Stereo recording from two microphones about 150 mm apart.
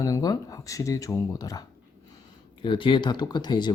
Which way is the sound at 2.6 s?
35° left (ahead or behind).